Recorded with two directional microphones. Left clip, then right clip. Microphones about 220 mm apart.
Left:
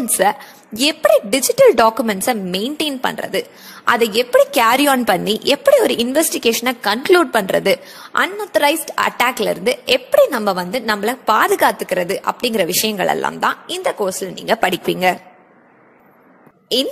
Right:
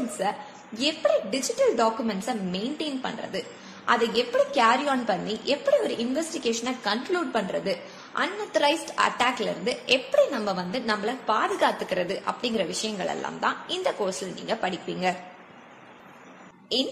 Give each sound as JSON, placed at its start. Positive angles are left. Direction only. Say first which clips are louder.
{"t": 0.2, "sound": "a woman's voice", "louder": "left 15 dB", "side_deg": 40}